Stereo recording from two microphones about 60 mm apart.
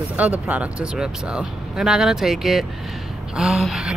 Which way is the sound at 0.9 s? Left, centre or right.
Centre.